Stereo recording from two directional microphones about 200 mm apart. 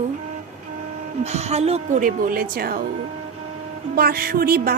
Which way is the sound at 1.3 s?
35° right (ahead or behind).